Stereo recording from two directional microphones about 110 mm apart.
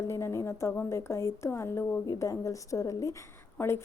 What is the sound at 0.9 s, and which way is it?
Speech, 25° left (ahead or behind).